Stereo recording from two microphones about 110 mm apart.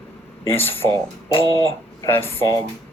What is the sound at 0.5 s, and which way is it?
Speech, 20° left (ahead or behind).